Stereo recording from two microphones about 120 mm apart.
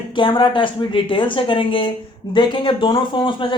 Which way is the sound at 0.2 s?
45° left (ahead or behind).